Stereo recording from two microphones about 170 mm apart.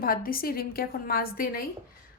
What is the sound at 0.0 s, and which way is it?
A woman's voice, 60° left (ahead or behind).